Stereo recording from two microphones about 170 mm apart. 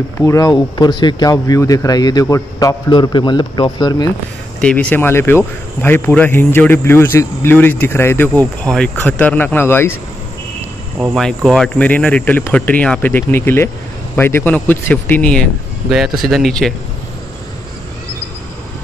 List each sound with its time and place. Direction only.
0.2 s speech: 20° left (ahead or behind)
4.6 s a man's voice: 5° left (ahead or behind)
11.1 s a man's voice: centre (ahead or behind)